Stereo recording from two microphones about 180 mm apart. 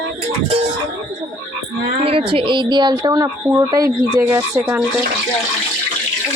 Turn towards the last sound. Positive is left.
turn(degrees=-10)  # may be behind; listen again after turning